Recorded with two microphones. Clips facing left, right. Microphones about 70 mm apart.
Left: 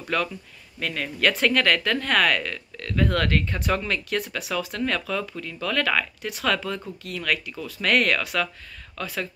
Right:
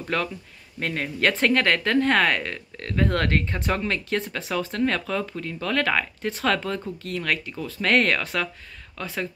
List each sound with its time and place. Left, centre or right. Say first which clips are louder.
0.1 s speech: left 1 dB; right